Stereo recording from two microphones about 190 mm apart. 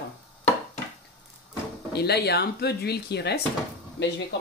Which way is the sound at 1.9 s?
55° left (ahead or behind).